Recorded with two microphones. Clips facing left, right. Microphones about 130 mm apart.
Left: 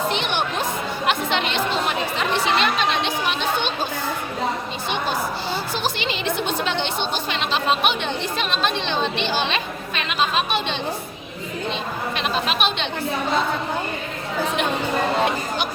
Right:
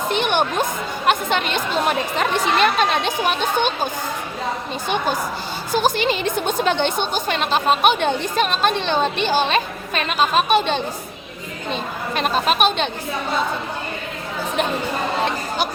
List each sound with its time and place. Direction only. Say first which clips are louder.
0.1 s music: right 4 dB; 50° right (ahead or behind)
1.0 s a woman's voice: right 3 dB; 45° right (ahead or behind)
5.7 s a woman's voice: right 6 dB; 45° right (ahead or behind)
12.1 s a woman's voice: right 6 dB; 45° right (ahead or behind)